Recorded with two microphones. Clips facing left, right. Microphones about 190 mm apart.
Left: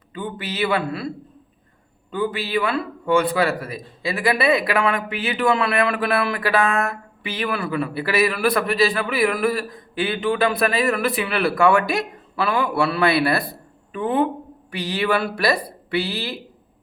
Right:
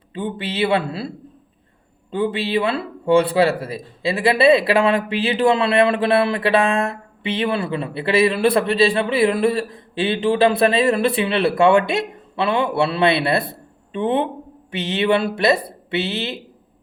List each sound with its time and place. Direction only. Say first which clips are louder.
0.1 s speech: right 4 dB; 30° right (ahead or behind)